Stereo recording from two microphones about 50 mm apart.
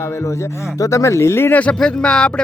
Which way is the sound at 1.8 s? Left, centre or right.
Centre.